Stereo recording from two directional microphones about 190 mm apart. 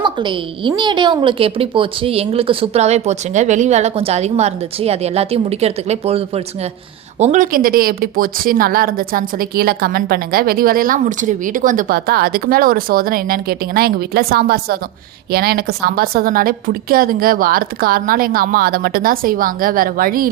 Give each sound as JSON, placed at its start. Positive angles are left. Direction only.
{"t": 0.0, "sound": "a woman's voice", "side_deg": -25}